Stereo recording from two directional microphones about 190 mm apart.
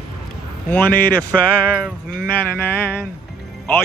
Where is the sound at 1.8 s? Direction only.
5° right (ahead or behind).